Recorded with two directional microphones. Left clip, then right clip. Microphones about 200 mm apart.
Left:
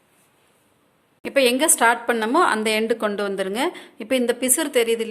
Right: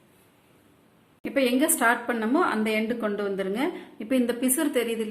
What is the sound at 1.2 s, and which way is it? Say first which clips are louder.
A woman's voice: left 6 dB; 50° left (ahead or behind).